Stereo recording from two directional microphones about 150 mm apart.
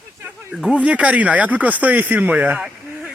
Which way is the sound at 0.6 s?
5° right (ahead or behind).